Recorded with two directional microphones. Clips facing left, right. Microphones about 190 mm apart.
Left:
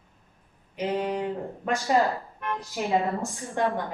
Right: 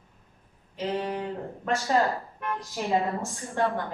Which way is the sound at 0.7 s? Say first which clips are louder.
Left 2 dB; 15° left (ahead or behind).